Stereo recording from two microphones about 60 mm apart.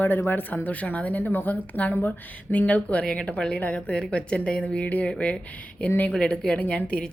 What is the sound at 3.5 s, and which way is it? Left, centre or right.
Speech, left.